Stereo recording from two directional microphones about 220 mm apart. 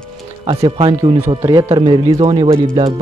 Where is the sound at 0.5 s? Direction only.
25° right (ahead or behind).